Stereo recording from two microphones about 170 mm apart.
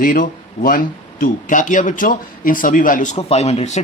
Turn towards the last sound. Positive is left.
turn(degrees=40)  # may be behind; listen again after turning